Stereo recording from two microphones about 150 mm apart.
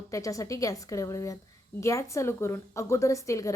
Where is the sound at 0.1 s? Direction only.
20° left (ahead or behind).